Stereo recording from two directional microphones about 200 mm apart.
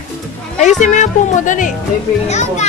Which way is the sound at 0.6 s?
35° left (ahead or behind).